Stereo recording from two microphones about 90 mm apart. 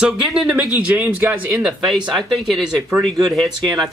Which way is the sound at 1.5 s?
5° right (ahead or behind).